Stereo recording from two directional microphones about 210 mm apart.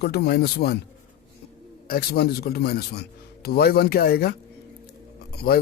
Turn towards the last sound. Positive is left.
turn(degrees=45)  # may be behind; listen again after turning